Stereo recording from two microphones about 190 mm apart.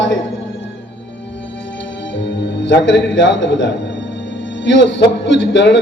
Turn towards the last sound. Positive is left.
turn(degrees=65)  # may be behind; listen again after turning